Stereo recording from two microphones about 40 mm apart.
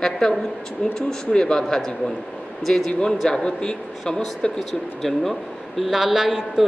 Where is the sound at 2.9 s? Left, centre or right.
Left.